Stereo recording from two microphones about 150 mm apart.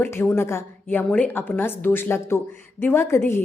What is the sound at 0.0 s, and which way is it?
A woman's voice, 15° left (ahead or behind).